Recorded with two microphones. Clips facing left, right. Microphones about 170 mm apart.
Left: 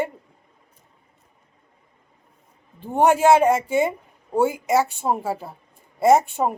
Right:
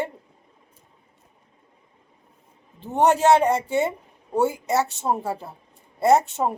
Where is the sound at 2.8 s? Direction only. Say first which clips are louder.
Left 2 dB; 15° left (ahead or behind).